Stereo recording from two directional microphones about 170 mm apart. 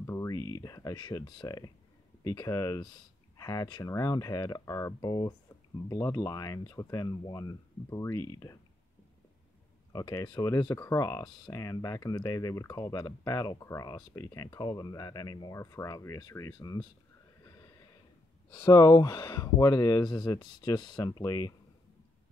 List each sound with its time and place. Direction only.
0.0 s speech: 15° left (ahead or behind)
9.9 s speech: 20° left (ahead or behind)
17.5 s a sound: 20° left (ahead or behind)
18.6 s speech: 20° left (ahead or behind)